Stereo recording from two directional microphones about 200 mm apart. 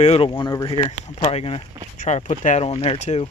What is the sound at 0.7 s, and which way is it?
Speech, 30° left (ahead or behind).